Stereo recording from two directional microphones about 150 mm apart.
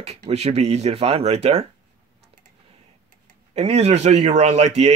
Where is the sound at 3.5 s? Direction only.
45° right (ahead or behind).